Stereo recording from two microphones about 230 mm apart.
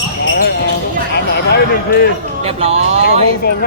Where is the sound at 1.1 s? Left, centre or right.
Left.